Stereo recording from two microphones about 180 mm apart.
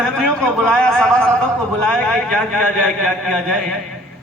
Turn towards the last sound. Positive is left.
turn(degrees=0)  # may be behind; listen again after turning